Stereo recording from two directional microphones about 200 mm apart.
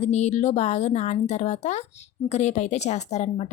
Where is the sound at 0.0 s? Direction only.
35° left (ahead or behind).